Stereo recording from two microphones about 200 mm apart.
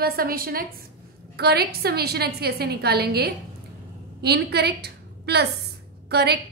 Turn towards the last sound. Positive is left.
turn(degrees=-55)  # may be behind; listen again after turning